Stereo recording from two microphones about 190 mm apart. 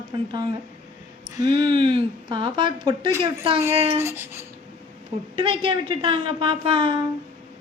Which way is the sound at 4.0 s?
15° right (ahead or behind).